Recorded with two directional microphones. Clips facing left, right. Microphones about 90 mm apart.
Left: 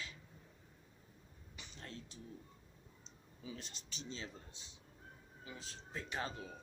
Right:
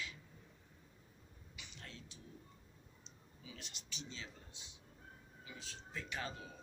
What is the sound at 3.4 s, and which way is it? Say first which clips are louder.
Speech: left 5 dB; 40° left (ahead or behind).